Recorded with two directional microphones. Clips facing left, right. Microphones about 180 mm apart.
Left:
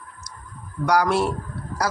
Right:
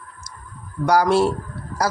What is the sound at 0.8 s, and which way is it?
Speech, 30° right (ahead or behind).